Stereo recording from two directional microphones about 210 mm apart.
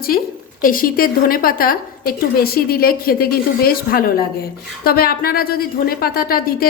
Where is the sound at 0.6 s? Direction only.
40° left (ahead or behind).